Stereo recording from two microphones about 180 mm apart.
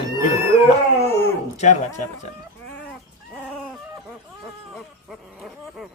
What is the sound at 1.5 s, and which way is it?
Speech, 40° left (ahead or behind).